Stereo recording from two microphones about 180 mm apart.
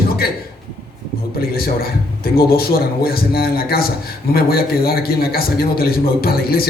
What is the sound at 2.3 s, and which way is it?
A man's voice, 55° left (ahead or behind).